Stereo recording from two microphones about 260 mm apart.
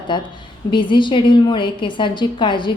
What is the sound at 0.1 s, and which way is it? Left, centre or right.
A woman's voice, centre.